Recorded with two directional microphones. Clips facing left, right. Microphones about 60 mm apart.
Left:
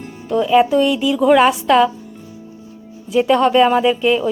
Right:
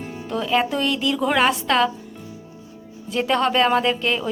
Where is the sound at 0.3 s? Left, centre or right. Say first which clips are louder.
Left 8 dB; centre.